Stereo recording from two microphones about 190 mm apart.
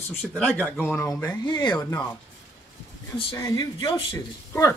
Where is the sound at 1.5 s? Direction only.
25° left (ahead or behind).